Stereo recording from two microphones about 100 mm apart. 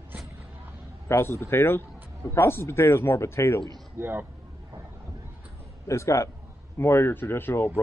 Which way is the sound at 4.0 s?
20° right (ahead or behind).